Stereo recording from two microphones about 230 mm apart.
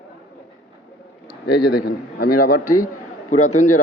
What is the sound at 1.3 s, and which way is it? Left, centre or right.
Speech, left.